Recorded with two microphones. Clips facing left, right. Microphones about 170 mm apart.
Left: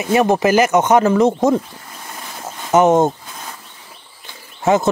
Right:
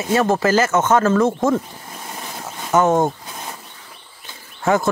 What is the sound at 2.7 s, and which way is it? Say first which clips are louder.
Speech: left 4 dB; 20° left (ahead or behind).